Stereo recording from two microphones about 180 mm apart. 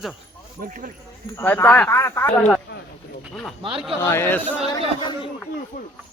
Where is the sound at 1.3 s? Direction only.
10° left (ahead or behind).